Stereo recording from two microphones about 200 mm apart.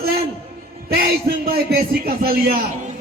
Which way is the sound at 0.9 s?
50° right (ahead or behind).